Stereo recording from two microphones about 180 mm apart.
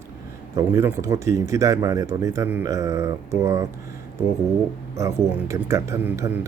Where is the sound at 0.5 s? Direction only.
15° right (ahead or behind).